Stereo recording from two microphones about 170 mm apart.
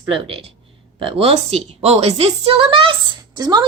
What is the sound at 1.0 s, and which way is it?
A woman's voice, 35° right (ahead or behind).